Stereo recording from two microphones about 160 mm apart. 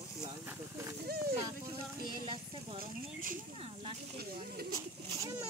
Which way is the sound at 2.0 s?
30° right (ahead or behind).